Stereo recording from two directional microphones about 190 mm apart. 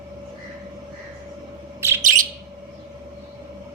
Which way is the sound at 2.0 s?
45° right (ahead or behind).